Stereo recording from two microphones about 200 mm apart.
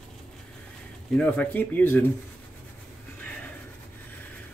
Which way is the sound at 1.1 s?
5° left (ahead or behind).